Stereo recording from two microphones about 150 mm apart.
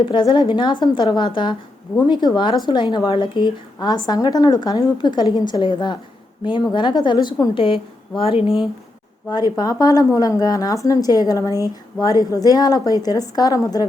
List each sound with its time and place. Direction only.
0.0 s a woman's voice: 35° left (ahead or behind)
9.3 s speech: 25° left (ahead or behind)